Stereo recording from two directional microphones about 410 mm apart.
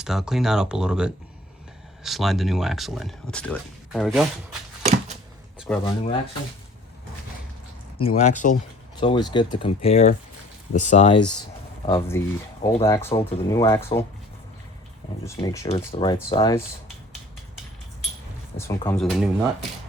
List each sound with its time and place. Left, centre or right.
0.0 s speech: centre
5.5 s speech: centre
7.9 s speech: centre
15.4 s speech: centre
18.5 s speech: centre